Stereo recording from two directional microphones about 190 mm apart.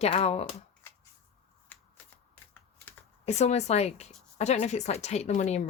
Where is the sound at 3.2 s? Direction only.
35° left (ahead or behind).